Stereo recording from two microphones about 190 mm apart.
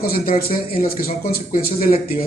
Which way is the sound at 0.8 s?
50° left (ahead or behind).